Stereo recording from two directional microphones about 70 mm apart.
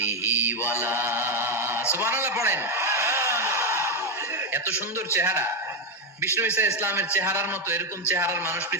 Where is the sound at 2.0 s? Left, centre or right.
Right.